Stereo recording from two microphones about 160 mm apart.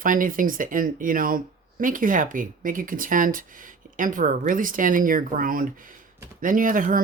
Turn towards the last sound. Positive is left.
turn(degrees=-55)  # may be behind; listen again after turning